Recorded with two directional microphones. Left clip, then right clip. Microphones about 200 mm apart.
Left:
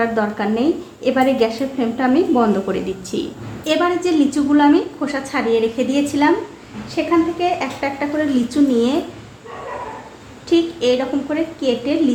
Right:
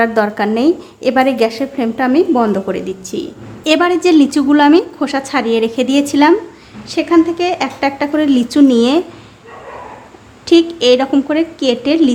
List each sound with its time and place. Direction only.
0.0 s a woman's voice: 35° right (ahead or behind); by 3.2 s 20° right (ahead or behind)
3.6 s a woman's voice: 50° right (ahead or behind)
10.4 s a woman's voice: 45° right (ahead or behind)